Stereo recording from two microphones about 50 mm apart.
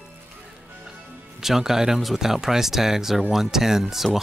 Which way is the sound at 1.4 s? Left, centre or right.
Centre.